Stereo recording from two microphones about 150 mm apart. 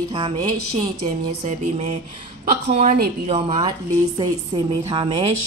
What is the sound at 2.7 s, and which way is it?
A woman's voice, 45° right (ahead or behind).